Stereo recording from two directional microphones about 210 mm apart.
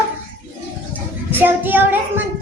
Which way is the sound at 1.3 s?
10° right (ahead or behind).